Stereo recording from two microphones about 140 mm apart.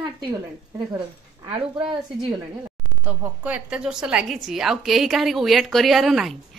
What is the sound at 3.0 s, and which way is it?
A woman's voice, 10° right (ahead or behind).